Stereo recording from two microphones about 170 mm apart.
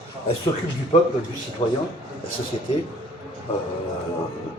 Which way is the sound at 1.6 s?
30° left (ahead or behind).